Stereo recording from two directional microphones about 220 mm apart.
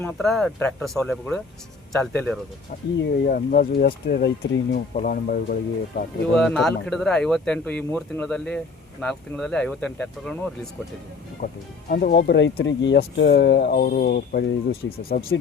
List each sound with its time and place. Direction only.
0.0 s speech: 5° left (ahead or behind)
3.2 s speech: 40° left (ahead or behind)
6.3 s speech: centre (ahead or behind)
11.9 s speech: 45° left (ahead or behind)